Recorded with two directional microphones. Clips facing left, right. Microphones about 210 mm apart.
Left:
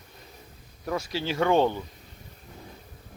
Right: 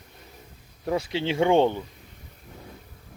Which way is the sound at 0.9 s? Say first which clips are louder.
Right 4 dB; 25° right (ahead or behind).